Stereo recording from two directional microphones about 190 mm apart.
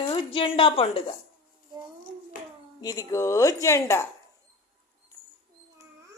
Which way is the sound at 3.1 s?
15° left (ahead or behind).